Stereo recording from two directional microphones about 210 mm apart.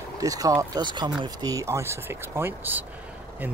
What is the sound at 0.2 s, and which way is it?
Speech, 15° right (ahead or behind).